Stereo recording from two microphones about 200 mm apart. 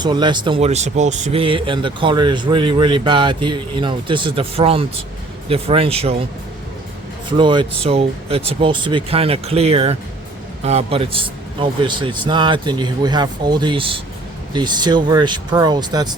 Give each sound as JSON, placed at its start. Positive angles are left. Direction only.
{"t": 0.0, "sound": "speech", "side_deg": -20}
{"t": 7.3, "sound": "speech", "side_deg": -25}